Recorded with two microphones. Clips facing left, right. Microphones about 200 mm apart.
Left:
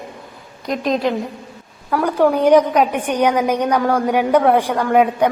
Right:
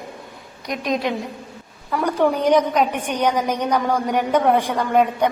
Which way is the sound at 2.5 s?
10° left (ahead or behind).